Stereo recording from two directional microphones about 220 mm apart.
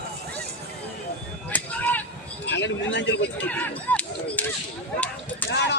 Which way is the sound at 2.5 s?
55° left (ahead or behind).